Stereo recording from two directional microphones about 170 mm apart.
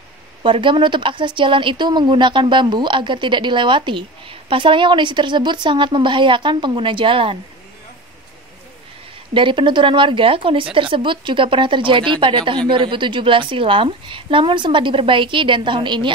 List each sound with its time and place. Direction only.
0.4 s speech: 30° right (ahead or behind)
9.3 s speech: 30° right (ahead or behind)